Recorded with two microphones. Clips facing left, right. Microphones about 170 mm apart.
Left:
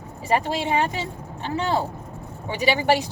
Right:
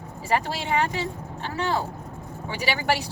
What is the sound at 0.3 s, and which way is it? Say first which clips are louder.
Speech: left 3 dB; 20° left (ahead or behind).